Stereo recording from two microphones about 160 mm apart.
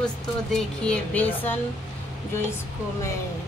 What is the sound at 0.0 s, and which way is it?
Speech, 5° left (ahead or behind).